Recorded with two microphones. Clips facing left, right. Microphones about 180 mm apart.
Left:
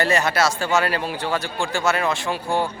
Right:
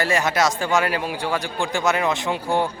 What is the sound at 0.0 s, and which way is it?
A man's voice, 10° right (ahead or behind).